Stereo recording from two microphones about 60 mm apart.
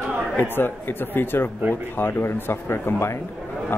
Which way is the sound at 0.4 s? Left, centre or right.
Left.